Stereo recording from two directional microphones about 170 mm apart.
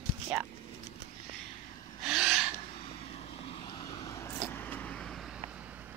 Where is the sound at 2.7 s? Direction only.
35° left (ahead or behind); by 5.9 s 10° right (ahead or behind).